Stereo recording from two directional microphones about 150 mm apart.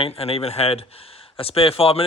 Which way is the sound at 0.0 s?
40° left (ahead or behind).